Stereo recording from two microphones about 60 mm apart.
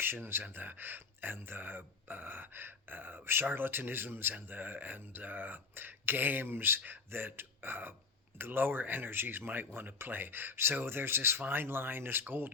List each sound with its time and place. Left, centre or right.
0.0 s speech: right